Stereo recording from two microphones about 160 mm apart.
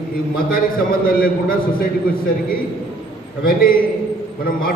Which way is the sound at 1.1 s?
65° left (ahead or behind).